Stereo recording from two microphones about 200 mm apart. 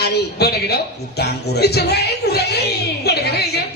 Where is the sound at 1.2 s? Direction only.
55° left (ahead or behind).